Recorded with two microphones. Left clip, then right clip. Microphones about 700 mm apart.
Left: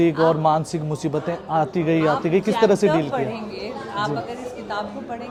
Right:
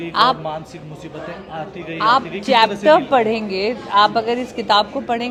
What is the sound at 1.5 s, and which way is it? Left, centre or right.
Speech, left.